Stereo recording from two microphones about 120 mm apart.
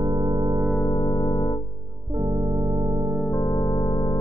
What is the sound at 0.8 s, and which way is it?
Music, 35° left (ahead or behind).